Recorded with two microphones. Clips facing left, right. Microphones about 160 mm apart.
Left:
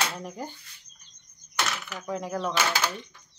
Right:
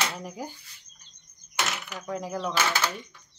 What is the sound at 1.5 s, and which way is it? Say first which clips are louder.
Coin: even; 20° right (ahead or behind).